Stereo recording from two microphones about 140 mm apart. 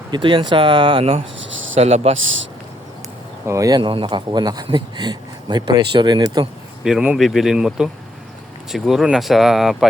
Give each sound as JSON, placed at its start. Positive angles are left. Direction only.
{"t": 0.1, "sound": "speech", "side_deg": -35}
{"t": 1.8, "sound": "speech", "side_deg": -50}
{"t": 3.4, "sound": "speech", "side_deg": -20}
{"t": 6.8, "sound": "speech", "side_deg": -5}